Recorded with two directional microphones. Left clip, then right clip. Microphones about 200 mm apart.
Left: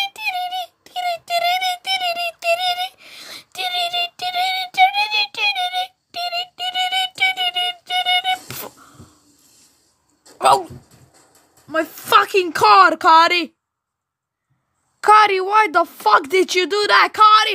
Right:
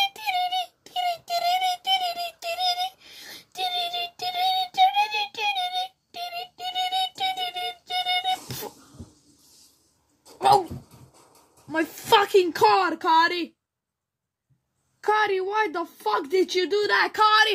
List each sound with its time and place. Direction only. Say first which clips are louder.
0.0 s child singing: left 2 dB; 20° left (ahead or behind); by 8.4 s 35° left (ahead or behind)
8.5 s a sound: left 3 dB; 35° left (ahead or behind)
11.7 s speech: left 5 dB; 30° left (ahead or behind); by 13.5 s 45° left (ahead or behind)
15.0 s speech: left 11 dB; 45° left (ahead or behind); by 17.5 s 30° left (ahead or behind)